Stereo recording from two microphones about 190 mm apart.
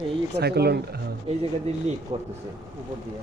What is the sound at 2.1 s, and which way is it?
Speech, 25° right (ahead or behind).